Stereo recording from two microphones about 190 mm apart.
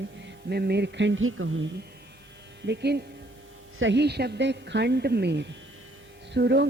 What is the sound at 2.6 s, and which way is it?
A woman's voice, 60° right (ahead or behind).